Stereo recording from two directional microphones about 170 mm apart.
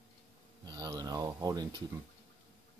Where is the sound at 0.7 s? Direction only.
25° right (ahead or behind).